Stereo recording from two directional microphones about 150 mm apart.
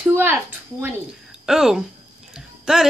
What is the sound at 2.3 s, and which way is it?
Music, 5° right (ahead or behind).